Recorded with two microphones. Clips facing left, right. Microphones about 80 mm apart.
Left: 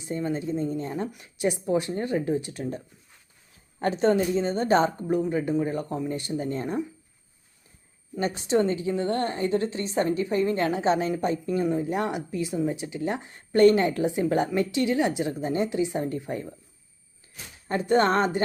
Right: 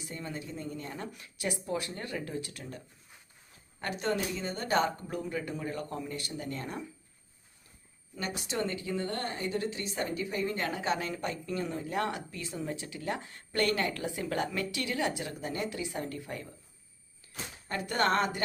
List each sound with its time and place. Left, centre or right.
0.0 s speech: left
8.4 s a woman's voice: left
17.7 s speech: left